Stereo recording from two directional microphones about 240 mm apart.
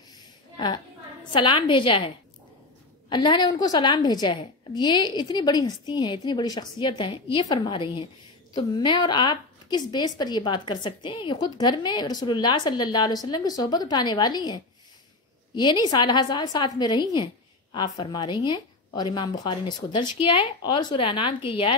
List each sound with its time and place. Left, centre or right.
1.3 s a woman's voice: left